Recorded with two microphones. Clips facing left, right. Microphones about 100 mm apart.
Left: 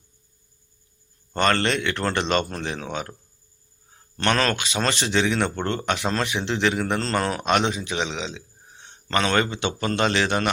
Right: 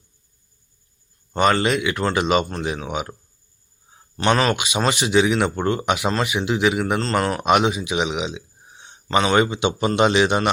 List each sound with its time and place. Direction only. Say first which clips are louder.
1.3 s a man's voice: right 3 dB; 10° right (ahead or behind)
3.9 s a sound: right 4 dB; 15° right (ahead or behind)
4.4 s a man's voice: right 3 dB; 10° right (ahead or behind)